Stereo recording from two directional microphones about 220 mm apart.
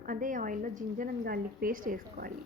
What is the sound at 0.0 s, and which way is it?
A woman's voice, 40° right (ahead or behind).